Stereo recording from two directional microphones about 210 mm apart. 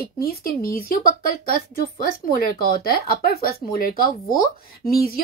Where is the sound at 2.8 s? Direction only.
45° left (ahead or behind).